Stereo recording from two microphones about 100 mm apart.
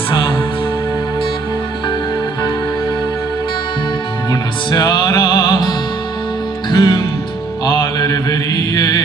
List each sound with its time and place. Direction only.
4.3 s music: 45° left (ahead or behind)
7.6 s mantra: 45° left (ahead or behind)